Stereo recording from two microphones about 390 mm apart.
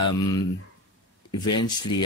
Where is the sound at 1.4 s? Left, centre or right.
Left.